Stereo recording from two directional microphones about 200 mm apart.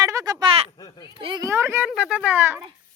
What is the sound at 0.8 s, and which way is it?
Speech, 20° left (ahead or behind).